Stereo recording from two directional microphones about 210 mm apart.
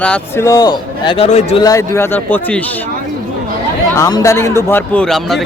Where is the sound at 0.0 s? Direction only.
10° left (ahead or behind).